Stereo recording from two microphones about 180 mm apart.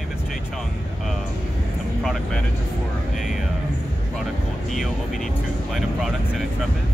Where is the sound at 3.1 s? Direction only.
Centre (ahead or behind).